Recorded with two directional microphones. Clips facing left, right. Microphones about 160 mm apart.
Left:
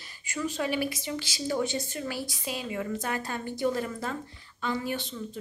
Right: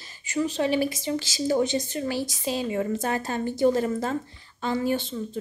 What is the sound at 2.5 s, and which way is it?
A woman's voice, 30° right (ahead or behind).